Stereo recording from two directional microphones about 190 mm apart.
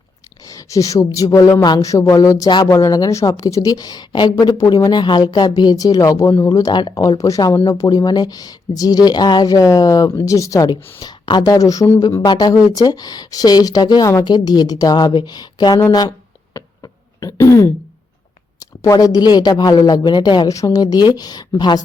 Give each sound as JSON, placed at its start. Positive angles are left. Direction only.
{"t": 0.4, "sound": "a woman's voice", "side_deg": 15}
{"t": 16.6, "sound": "throat clearing", "side_deg": 20}
{"t": 18.6, "sound": "a woman's voice", "side_deg": 20}